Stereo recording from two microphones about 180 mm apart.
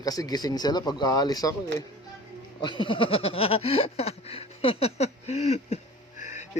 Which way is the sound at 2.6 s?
25° left (ahead or behind).